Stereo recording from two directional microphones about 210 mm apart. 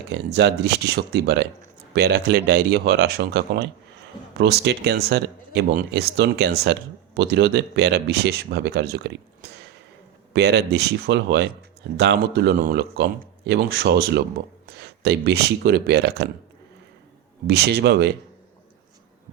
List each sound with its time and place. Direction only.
0.1 s speech: 50° right (ahead or behind)
17.4 s speech: 50° right (ahead or behind)